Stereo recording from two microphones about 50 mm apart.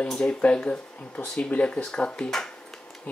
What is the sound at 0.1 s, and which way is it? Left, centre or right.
Speech, centre.